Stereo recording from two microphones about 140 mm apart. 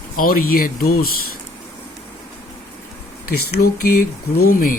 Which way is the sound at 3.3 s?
90° left.